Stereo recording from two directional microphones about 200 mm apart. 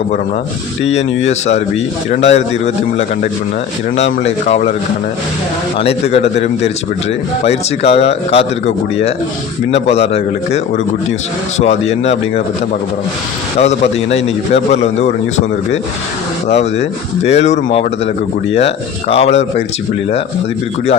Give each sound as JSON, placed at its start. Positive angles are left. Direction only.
{"t": 0.9, "sound": "a man's voice", "side_deg": 35}
{"t": 5.8, "sound": "a man's voice", "side_deg": 30}
{"t": 11.6, "sound": "a man's voice", "side_deg": 35}
{"t": 13.6, "sound": "a man's voice", "side_deg": 30}